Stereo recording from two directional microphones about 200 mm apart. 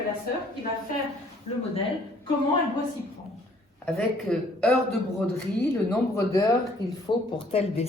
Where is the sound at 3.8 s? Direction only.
Centre (ahead or behind).